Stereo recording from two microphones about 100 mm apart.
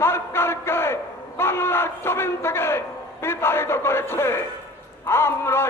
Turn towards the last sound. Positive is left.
turn(degrees=25)  # may be behind; listen again after turning